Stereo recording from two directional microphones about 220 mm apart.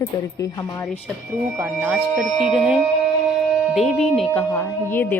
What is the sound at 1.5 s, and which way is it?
A woman's voice, 5° right (ahead or behind).